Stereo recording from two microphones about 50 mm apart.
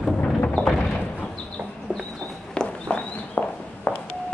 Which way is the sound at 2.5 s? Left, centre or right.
Left.